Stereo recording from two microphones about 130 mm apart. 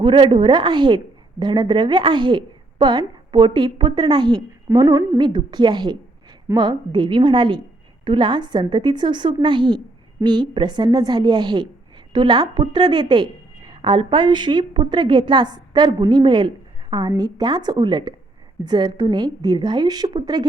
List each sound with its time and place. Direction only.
0.0 s a woman's voice: 35° right (ahead or behind)